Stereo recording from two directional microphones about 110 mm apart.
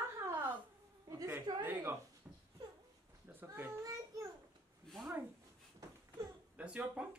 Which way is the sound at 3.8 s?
30° right (ahead or behind).